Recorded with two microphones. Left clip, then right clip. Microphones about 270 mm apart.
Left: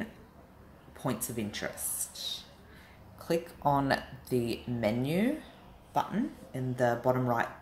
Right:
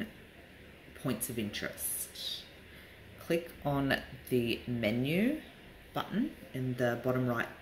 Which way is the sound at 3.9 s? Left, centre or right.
Centre.